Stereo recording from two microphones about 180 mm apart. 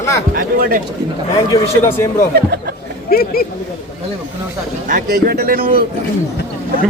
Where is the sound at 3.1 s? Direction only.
55° left (ahead or behind).